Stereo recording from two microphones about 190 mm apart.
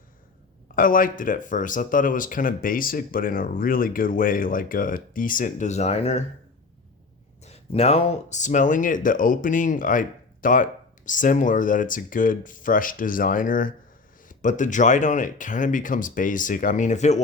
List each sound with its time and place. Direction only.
0.8 s speech: 45° left (ahead or behind)
7.4 s speech: 35° left (ahead or behind)